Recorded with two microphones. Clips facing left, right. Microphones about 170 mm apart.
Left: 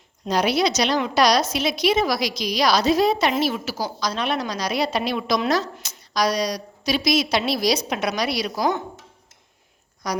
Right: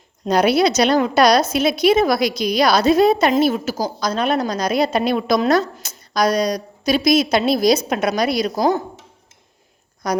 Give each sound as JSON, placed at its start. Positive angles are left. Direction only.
{"t": 0.3, "sound": "a woman's voice", "side_deg": -55}
{"t": 10.0, "sound": "a woman's voice", "side_deg": -55}